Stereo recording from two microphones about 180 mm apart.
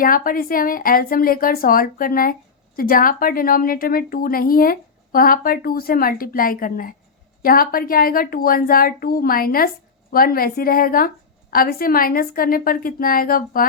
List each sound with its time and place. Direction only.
0.0 s a woman's voice: 50° left (ahead or behind)